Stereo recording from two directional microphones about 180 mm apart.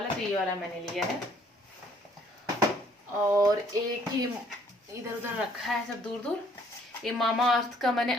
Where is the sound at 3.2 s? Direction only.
20° right (ahead or behind).